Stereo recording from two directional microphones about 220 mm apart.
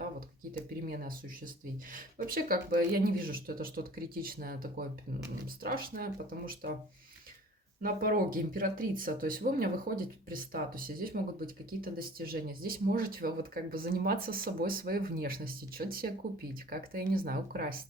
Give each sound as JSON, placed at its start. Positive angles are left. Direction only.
{"t": 2.1, "sound": "speech", "side_deg": -40}
{"t": 7.8, "sound": "speech", "side_deg": -40}